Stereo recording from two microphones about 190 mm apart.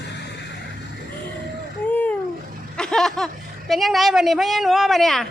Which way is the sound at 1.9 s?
10° left (ahead or behind).